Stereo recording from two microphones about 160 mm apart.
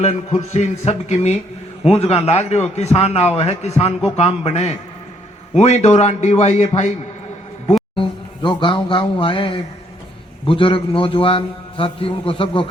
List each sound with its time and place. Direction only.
0.0 s a man's voice: 40° left (ahead or behind)
7.9 s a man's voice: 30° left (ahead or behind)